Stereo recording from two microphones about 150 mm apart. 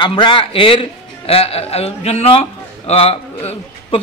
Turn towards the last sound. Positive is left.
turn(degrees=40)  # may be behind; listen again after turning